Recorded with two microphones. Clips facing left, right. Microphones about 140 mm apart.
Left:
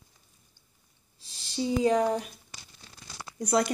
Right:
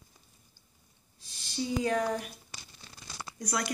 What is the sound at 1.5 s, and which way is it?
Speech, 25° left (ahead or behind).